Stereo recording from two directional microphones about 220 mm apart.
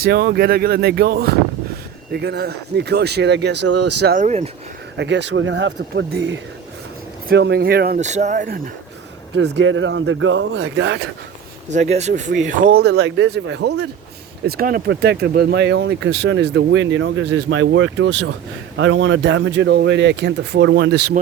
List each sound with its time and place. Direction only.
0.1 s speech: 45° right (ahead or behind)
3.7 s speech: 90° right
4.0 s speech: 35° right (ahead or behind)
4.9 s speech: 55° right (ahead or behind)
9.3 s speech: 55° right (ahead or behind)
11.7 s speech: 30° right (ahead or behind); by 21.2 s 50° right (ahead or behind)